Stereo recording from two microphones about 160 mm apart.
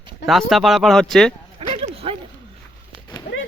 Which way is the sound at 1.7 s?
35° right (ahead or behind).